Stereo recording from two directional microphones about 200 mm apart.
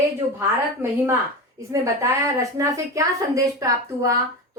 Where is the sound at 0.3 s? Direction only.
15° right (ahead or behind).